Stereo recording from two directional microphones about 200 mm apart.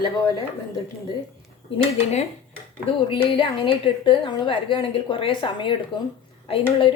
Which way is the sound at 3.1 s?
25° left (ahead or behind).